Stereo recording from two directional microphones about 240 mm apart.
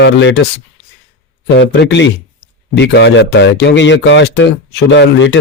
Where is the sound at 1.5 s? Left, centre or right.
Left.